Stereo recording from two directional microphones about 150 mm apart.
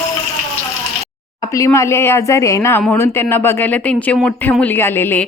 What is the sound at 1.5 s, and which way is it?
Speech, 20° left (ahead or behind).